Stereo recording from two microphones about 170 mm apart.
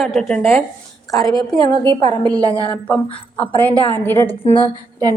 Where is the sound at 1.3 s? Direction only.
25° left (ahead or behind).